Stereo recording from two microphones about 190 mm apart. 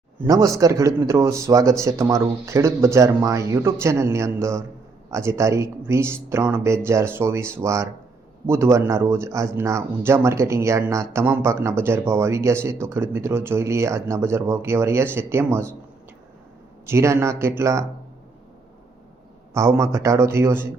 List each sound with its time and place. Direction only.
0.3 s speech: 15° right (ahead or behind)
16.8 s speech: 15° right (ahead or behind)
19.5 s speech: 15° right (ahead or behind)